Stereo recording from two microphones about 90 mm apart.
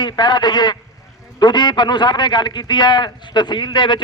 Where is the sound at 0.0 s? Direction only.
50° left (ahead or behind).